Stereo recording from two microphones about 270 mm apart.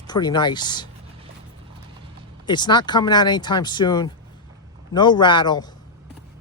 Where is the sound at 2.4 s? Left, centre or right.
Centre.